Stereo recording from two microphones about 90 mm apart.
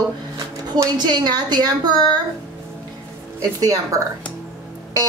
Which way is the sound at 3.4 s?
40° right (ahead or behind).